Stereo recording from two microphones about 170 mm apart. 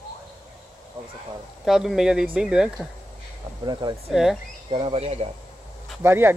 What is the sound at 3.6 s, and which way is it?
Speech, 25° right (ahead or behind).